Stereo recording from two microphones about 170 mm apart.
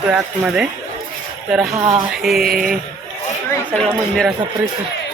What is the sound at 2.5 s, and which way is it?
Speech, 55° right (ahead or behind).